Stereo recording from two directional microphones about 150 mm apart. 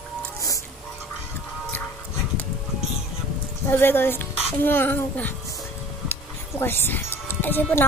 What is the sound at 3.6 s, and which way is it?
A child's voice, 15° left (ahead or behind).